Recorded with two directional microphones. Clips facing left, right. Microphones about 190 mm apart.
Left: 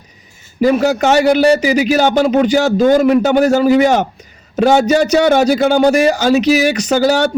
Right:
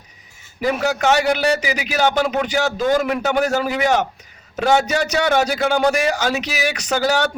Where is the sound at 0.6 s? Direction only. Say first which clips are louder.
Left 7 dB; 30° left (ahead or behind).